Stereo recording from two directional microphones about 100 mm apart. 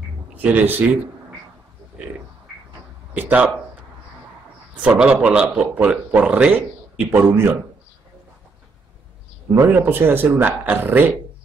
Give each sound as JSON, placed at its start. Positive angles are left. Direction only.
{"t": 0.3, "sound": "speech", "side_deg": -15}
{"t": 3.2, "sound": "speech", "side_deg": -15}
{"t": 4.8, "sound": "speech", "side_deg": -10}
{"t": 9.8, "sound": "speech", "side_deg": -20}